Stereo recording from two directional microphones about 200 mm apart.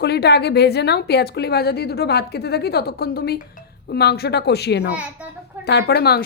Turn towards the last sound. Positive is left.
turn(degrees=50)  # may be behind; listen again after turning